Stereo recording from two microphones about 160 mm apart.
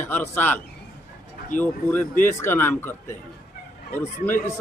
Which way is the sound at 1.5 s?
50° left (ahead or behind).